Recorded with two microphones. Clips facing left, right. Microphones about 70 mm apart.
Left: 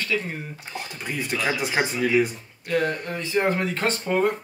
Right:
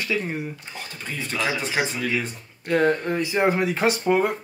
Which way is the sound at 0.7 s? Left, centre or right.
Centre.